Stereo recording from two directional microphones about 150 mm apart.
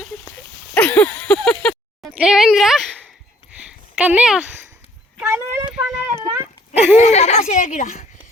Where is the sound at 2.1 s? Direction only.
5° right (ahead or behind).